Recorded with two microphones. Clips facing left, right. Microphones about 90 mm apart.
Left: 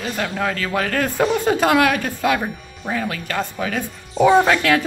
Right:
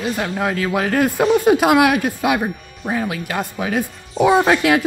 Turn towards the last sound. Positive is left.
turn(degrees=-10)  # may be behind; listen again after turning